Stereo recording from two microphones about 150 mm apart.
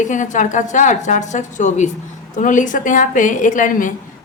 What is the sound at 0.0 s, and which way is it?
A woman's voice, 55° left (ahead or behind).